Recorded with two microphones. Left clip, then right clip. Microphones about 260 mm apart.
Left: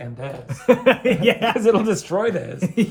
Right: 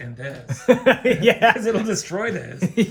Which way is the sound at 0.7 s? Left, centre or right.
Right.